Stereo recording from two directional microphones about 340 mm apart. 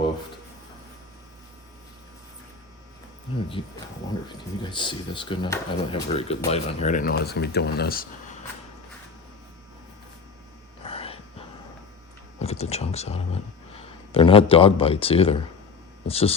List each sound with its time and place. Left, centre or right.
3.6 s speech: centre
10.8 s a sound: centre
12.4 s speech: centre